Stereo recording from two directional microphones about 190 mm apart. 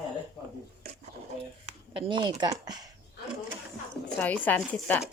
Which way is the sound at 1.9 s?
25° right (ahead or behind).